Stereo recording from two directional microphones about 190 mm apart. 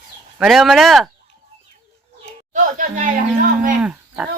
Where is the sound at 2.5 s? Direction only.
45° right (ahead or behind).